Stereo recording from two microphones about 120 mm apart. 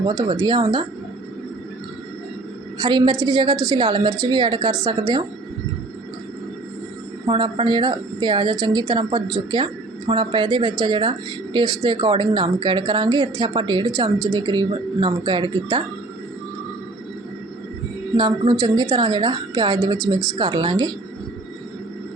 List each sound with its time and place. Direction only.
0.0 s a woman's voice: 40° right (ahead or behind)
2.8 s a woman's voice: 40° right (ahead or behind)
7.3 s a woman's voice: 40° right (ahead or behind)
18.2 s a woman's voice: 35° right (ahead or behind)